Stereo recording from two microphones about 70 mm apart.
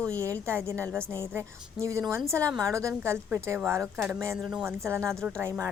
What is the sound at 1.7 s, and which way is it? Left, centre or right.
A woman's voice, right.